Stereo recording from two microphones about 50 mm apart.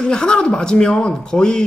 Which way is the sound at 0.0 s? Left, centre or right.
Centre.